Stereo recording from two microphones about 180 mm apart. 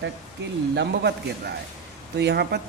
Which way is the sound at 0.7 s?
70° right (ahead or behind).